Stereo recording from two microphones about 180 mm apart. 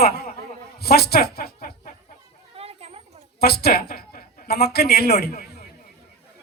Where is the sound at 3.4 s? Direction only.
60° left (ahead or behind).